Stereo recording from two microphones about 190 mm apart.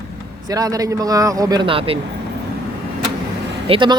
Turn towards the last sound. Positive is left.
turn(degrees=-25)  # may be behind; listen again after turning